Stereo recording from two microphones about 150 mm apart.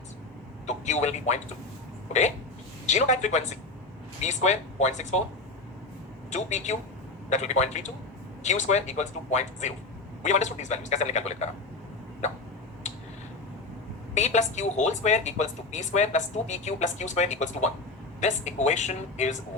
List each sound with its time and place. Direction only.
0.7 s a woman's voice: 50° left (ahead or behind)
2.8 s a woman's voice: 50° left (ahead or behind)
6.3 s a woman's voice: 50° left (ahead or behind)
14.1 s a woman's voice: 50° left (ahead or behind)